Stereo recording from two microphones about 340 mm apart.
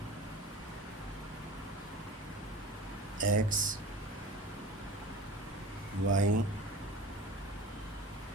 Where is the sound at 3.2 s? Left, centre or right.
Right.